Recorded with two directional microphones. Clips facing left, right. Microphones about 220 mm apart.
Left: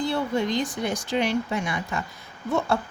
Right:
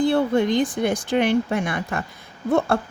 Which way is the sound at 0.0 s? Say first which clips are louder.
Right 6 dB; 55° right (ahead or behind).